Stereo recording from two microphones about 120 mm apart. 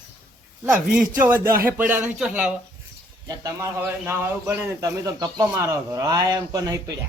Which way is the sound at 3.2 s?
25° right (ahead or behind).